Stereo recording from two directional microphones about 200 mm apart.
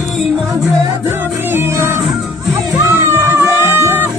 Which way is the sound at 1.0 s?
10° right (ahead or behind).